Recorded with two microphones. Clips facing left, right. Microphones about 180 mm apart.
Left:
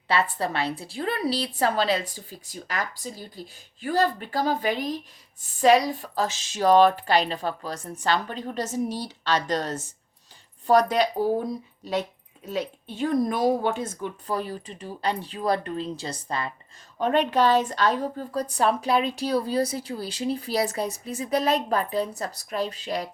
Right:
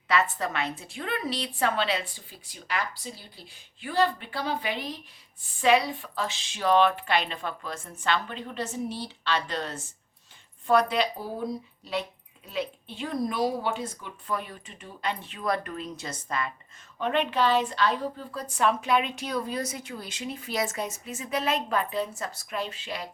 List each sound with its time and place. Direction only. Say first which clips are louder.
0.1 s a woman's voice: left 2 dB; 30° left (ahead or behind)
12.5 s a woman's voice: left 3 dB; 45° left (ahead or behind)